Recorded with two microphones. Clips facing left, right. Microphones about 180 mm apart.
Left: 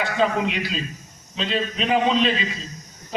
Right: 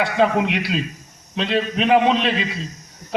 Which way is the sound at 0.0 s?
65° right (ahead or behind).